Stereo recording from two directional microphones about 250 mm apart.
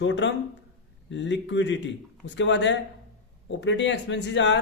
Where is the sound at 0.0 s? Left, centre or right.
Left.